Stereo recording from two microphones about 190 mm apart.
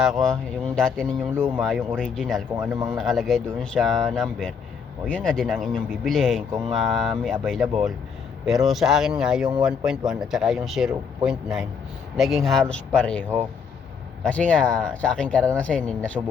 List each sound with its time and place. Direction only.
0.0 s speech: centre (ahead or behind)
2.6 s speech: 20° right (ahead or behind)
3.0 s speech: centre (ahead or behind)
14.3 s speech: 5° left (ahead or behind)